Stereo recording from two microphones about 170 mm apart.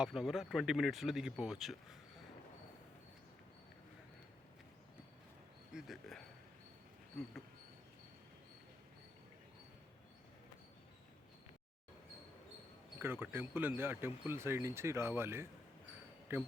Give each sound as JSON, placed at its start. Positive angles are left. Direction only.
{"t": 0.0, "sound": "speech", "side_deg": -5}
{"t": 5.7, "sound": "speech", "side_deg": 0}
{"t": 13.0, "sound": "speech", "side_deg": -10}